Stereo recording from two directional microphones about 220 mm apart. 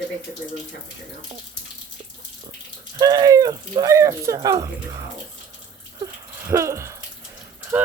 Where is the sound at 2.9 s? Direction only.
15° right (ahead or behind).